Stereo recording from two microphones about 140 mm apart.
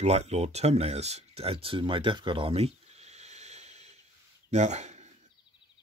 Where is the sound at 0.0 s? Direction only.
50° right (ahead or behind).